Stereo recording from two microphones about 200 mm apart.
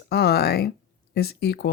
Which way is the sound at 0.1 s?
50° left (ahead or behind).